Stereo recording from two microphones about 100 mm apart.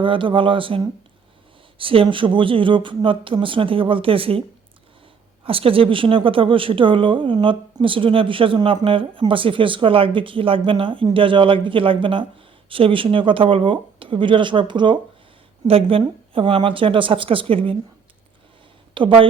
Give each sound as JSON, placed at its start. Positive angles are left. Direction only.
{"t": 0.0, "sound": "speech", "side_deg": -60}
{"t": 1.8, "sound": "speech", "side_deg": -65}
{"t": 5.5, "sound": "speech", "side_deg": -65}
{"t": 15.6, "sound": "speech", "side_deg": -70}
{"t": 18.9, "sound": "speech", "side_deg": -60}